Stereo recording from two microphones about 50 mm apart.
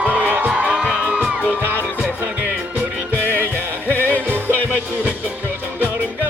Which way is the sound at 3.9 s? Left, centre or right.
Left.